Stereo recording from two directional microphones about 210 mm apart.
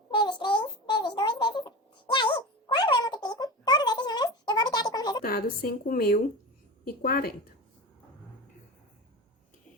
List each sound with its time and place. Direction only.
0.1 s a sound: 20° left (ahead or behind)
2.1 s cat: 20° left (ahead or behind)
5.2 s a woman's voice: 45° left (ahead or behind)